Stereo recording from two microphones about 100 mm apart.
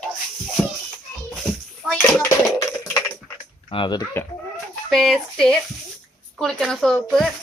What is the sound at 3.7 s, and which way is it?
Speech, 65° left (ahead or behind).